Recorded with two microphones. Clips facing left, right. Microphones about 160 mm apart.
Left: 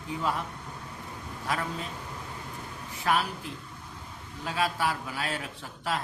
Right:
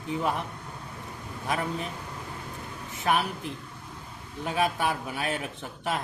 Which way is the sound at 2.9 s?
20° right (ahead or behind).